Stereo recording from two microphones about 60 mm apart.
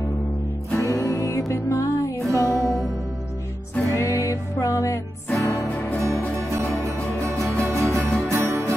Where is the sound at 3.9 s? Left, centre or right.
Left.